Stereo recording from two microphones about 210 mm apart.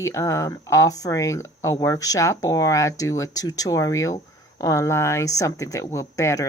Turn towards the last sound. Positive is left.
turn(degrees=15)  # may be behind; listen again after turning